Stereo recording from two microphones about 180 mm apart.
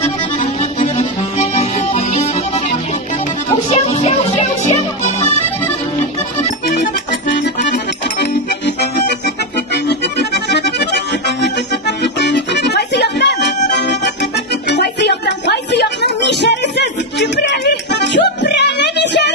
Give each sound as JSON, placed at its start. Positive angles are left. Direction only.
{"t": 0.0, "sound": "accordion", "side_deg": 40}
{"t": 3.7, "sound": "music", "side_deg": 35}
{"t": 7.3, "sound": "accordion", "side_deg": 65}
{"t": 13.7, "sound": "music", "side_deg": 70}